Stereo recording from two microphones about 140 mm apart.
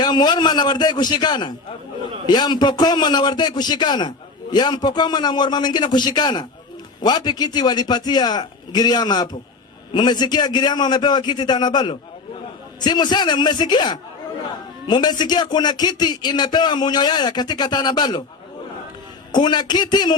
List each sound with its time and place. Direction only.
0.0 s a man's voice: 30° left (ahead or behind)
19.3 s a man's voice: 30° left (ahead or behind)